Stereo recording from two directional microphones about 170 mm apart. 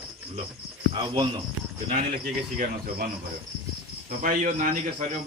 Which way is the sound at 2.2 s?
60° right (ahead or behind).